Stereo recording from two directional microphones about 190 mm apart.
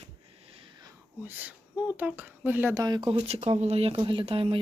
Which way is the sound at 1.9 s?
10° right (ahead or behind).